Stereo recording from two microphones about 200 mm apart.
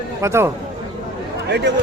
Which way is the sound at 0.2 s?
15° right (ahead or behind).